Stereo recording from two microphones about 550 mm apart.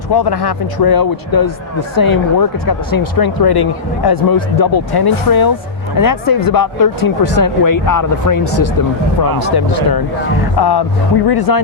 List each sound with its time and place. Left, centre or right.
0.1 s speech: left
9.6 s speech: left
10.6 s music: left
11.3 s speech: left